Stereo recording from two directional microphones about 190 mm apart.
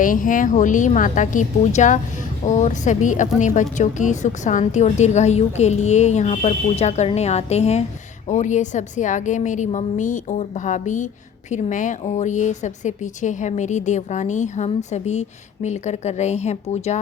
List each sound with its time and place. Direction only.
0.0 s a woman's voice: 45° left (ahead or behind)